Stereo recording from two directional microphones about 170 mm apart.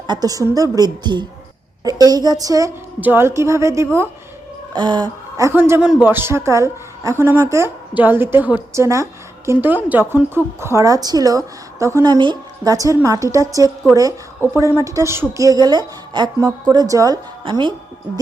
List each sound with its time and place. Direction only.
0.1 s a woman's voice: 20° right (ahead or behind)